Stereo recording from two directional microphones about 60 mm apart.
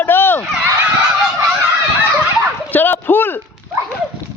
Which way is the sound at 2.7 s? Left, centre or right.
Left.